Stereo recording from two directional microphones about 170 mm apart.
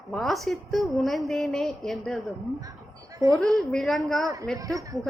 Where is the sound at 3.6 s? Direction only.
5° left (ahead or behind).